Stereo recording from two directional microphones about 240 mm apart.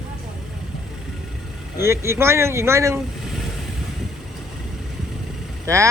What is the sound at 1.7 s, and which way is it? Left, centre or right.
Speech, centre.